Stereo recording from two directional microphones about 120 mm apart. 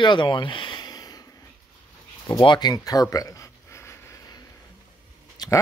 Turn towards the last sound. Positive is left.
turn(degrees=35)  # may be behind; listen again after turning